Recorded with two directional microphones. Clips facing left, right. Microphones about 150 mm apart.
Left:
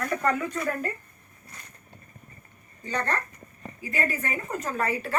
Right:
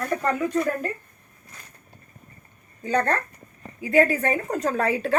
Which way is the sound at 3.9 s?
90° right.